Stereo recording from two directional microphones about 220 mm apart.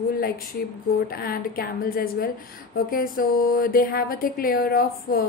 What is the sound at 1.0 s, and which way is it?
A woman's voice, 45° left (ahead or behind).